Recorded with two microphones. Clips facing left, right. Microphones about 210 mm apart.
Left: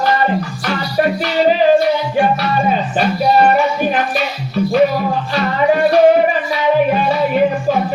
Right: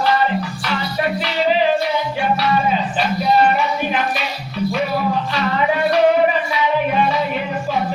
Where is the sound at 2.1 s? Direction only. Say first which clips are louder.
Left 3 dB; 50° left (ahead or behind).